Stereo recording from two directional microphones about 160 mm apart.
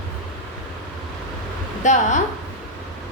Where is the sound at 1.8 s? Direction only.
50° left (ahead or behind).